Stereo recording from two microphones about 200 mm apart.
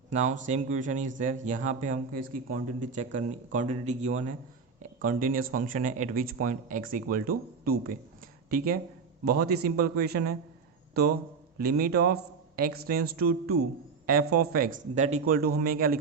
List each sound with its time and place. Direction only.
0.1 s speech: 35° right (ahead or behind)
11.5 s speech: 50° right (ahead or behind)
15.4 s speech: 50° right (ahead or behind)